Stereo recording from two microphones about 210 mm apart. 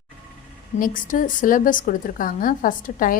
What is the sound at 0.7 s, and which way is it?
A woman's voice, 40° left (ahead or behind).